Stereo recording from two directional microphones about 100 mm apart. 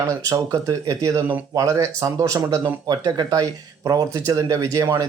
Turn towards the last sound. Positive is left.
turn(degrees=-35)  # may be behind; listen again after turning